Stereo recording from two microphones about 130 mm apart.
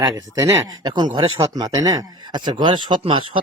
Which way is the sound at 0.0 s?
25° right (ahead or behind).